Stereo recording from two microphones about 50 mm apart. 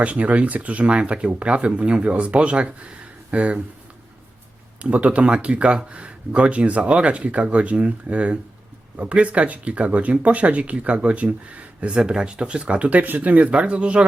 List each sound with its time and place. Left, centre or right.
0.0 s speech: right
4.8 s speech: right
11.9 s speech: centre
13.5 s speech: right